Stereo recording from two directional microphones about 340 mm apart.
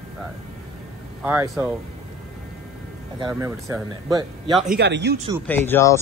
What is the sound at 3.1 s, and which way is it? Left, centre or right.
Speech, centre.